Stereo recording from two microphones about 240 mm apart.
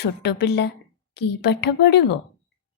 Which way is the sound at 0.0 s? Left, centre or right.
Left.